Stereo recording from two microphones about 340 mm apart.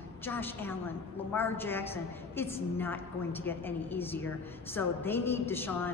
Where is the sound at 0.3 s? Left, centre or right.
Centre.